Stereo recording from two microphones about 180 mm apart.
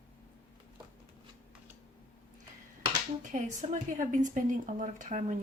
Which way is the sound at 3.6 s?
45° right (ahead or behind).